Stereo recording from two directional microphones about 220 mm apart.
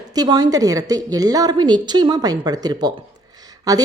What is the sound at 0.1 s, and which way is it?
A woman's voice, 15° right (ahead or behind).